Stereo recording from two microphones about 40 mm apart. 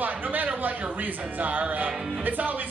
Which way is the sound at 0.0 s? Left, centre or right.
Right.